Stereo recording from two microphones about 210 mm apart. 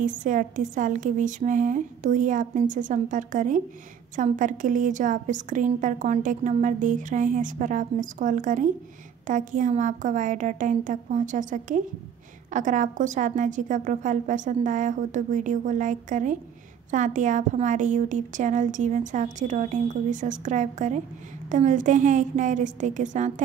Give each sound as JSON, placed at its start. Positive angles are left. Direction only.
{"t": 0.0, "sound": "a woman's voice", "side_deg": -40}